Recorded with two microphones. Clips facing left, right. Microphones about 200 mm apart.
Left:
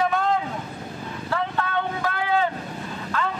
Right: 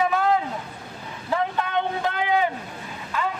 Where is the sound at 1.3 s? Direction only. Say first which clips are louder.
Right 2 dB; 15° right (ahead or behind).